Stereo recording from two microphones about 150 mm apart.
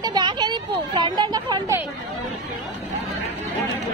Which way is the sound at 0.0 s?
30° right (ahead or behind).